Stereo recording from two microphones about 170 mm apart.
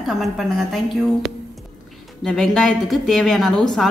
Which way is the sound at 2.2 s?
5° left (ahead or behind).